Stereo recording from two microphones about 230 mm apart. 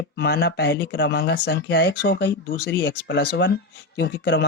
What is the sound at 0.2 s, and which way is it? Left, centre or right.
Speech, left.